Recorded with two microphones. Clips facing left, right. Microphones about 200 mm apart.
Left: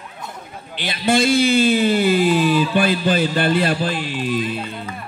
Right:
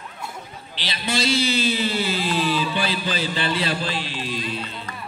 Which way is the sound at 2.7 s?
50° left (ahead or behind).